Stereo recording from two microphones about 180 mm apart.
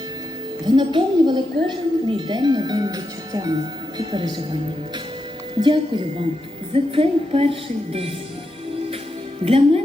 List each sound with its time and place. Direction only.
0.6 s a woman's voice: 25° right (ahead or behind)
5.6 s a woman's voice: 30° right (ahead or behind)
6.7 s music: 30° right (ahead or behind)
9.4 s music: 30° right (ahead or behind)